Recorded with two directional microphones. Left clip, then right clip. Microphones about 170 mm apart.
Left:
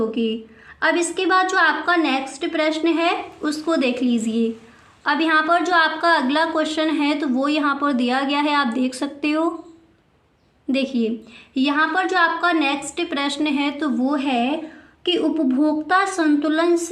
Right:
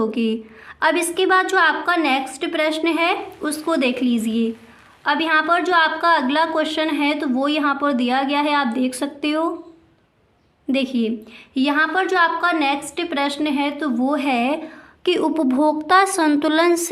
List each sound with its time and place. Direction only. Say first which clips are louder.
0.0 s a woman's voice: right 1 dB; 30° right (ahead or behind); by 9.5 s 10° right (ahead or behind)
10.7 s a woman's voice: right 1 dB; 15° right (ahead or behind)
14.0 s a woman's voice: right 2 dB; 20° right (ahead or behind)